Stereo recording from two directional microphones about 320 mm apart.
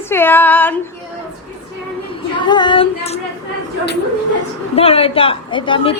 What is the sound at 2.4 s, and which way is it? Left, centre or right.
Speech, centre.